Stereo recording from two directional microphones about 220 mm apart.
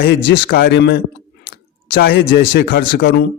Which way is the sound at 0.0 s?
45° left (ahead or behind).